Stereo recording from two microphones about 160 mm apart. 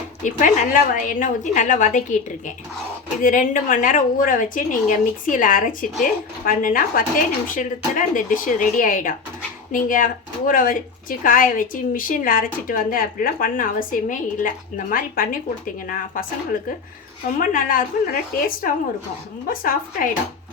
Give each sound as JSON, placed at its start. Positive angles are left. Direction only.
{"t": 0.2, "sound": "a woman's voice", "side_deg": 50}
{"t": 3.2, "sound": "speech", "side_deg": 55}
{"t": 17.4, "sound": "speech", "side_deg": 60}